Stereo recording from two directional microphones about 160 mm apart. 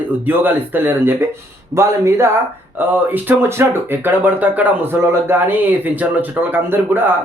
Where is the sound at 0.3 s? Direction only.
10° right (ahead or behind).